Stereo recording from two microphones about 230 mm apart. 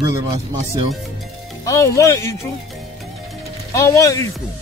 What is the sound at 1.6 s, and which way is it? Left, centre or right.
Speech, centre.